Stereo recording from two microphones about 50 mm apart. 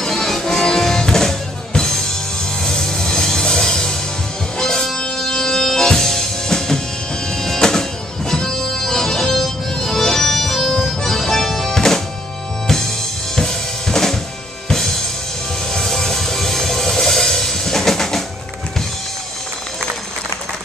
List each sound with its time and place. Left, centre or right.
0.0 s music: centre
13.4 s drum kit: centre
14.7 s music: centre